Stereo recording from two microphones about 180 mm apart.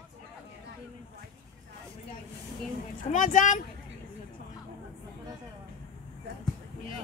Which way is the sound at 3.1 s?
45° left (ahead or behind).